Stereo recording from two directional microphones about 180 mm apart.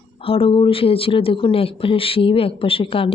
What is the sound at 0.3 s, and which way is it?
Speech, 30° left (ahead or behind).